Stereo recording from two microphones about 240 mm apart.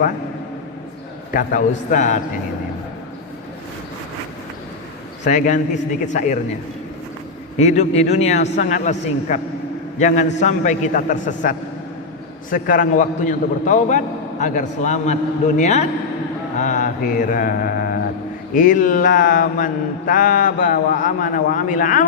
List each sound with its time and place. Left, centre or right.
1.3 s mantra: left
5.2 s mantra: left
7.6 s a man's voice: left
10.0 s mantra: left